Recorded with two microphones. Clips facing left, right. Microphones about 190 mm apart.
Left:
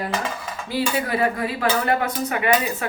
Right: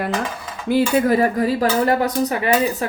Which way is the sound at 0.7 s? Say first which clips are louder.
Right 8 dB; 45° right (ahead or behind).